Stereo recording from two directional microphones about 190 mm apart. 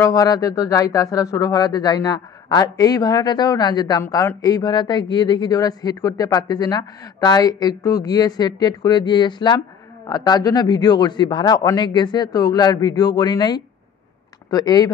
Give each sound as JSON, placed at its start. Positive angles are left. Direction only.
{"t": 0.0, "sound": "speech", "side_deg": 20}